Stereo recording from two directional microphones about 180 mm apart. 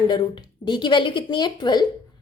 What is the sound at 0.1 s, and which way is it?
A woman's voice, 25° left (ahead or behind).